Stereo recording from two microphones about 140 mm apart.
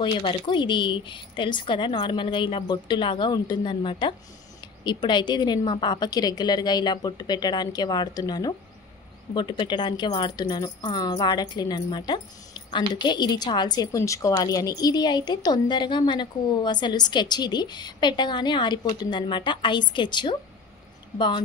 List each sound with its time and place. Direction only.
0.0 s a woman's voice: 35° left (ahead or behind)